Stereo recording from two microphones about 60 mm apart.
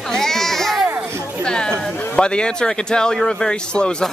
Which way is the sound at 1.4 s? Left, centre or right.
Centre.